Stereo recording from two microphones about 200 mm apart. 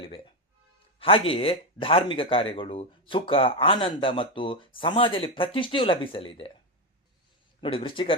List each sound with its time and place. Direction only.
0.9 s speech: 25° left (ahead or behind)
7.6 s speech: 25° left (ahead or behind)